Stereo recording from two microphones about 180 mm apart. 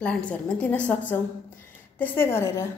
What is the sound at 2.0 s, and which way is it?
Speech, 10° left (ahead or behind).